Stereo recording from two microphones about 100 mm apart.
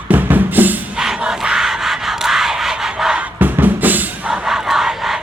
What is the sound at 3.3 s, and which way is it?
Music, 20° right (ahead or behind).